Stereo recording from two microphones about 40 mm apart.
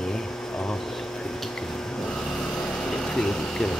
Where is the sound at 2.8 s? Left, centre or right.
Centre.